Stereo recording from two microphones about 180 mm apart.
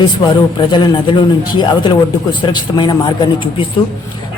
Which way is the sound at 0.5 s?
25° left (ahead or behind).